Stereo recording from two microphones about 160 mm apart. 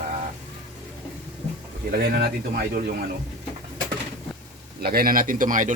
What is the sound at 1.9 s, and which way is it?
Speech, 70° right (ahead or behind).